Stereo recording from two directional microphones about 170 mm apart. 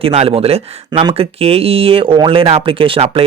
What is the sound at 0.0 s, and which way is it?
Speech, 35° right (ahead or behind).